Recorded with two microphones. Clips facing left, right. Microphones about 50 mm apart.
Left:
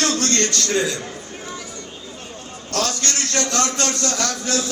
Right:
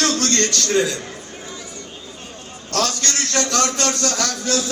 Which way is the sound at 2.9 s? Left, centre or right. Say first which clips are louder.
Right 1 dB; left.